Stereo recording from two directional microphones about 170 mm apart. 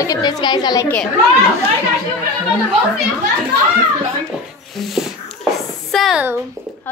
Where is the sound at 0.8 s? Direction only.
10° left (ahead or behind).